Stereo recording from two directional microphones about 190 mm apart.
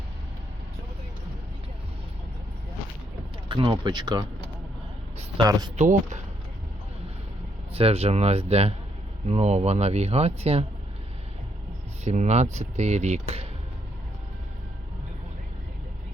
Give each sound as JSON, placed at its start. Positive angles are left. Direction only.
{"t": 3.5, "sound": "speech", "side_deg": -25}
{"t": 5.4, "sound": "speech", "side_deg": -20}
{"t": 5.7, "sound": "speech", "side_deg": -40}
{"t": 7.7, "sound": "speech", "side_deg": -30}
{"t": 12.0, "sound": "speech", "side_deg": -40}